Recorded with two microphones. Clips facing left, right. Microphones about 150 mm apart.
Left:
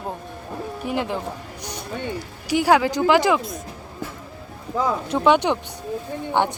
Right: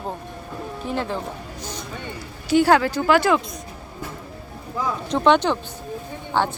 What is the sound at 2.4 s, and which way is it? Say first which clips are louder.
Speech: right 1 dB; 10° left (ahead or behind).